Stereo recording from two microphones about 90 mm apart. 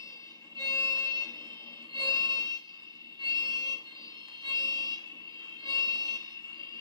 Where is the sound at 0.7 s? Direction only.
40° left (ahead or behind).